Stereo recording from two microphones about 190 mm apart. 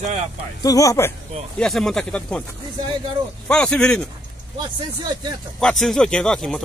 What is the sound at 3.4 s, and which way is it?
Speech, 5° left (ahead or behind).